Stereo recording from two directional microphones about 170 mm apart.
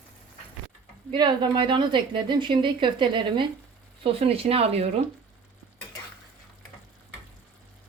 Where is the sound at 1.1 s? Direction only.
25° right (ahead or behind).